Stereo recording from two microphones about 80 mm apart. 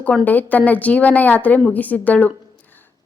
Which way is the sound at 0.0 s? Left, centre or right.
Centre.